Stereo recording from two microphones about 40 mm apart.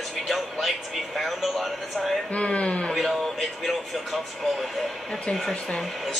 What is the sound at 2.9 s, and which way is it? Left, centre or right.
Speech, centre.